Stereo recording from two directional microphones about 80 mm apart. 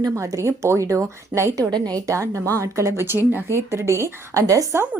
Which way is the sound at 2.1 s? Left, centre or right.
Right.